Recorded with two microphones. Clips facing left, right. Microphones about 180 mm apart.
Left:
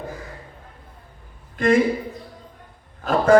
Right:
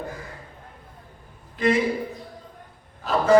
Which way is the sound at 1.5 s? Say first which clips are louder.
Left 4 dB; 50° left (ahead or behind).